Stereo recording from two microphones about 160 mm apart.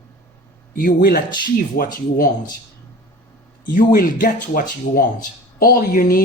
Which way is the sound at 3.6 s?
60° left (ahead or behind).